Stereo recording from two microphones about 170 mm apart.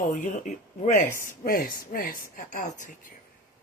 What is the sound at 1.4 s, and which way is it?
Speech, 55° left (ahead or behind).